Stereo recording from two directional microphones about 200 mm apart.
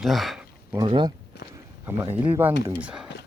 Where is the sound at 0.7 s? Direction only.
20° right (ahead or behind).